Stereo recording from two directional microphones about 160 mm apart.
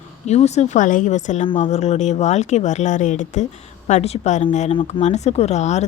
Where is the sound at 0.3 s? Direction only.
45° left (ahead or behind).